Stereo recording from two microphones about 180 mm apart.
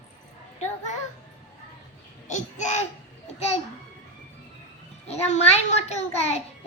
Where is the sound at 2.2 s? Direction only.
40° left (ahead or behind).